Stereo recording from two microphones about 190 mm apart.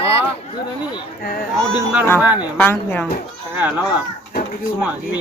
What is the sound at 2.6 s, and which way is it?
Speech, 10° left (ahead or behind).